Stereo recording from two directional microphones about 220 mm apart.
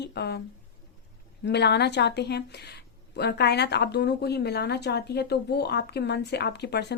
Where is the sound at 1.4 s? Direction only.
50° left (ahead or behind).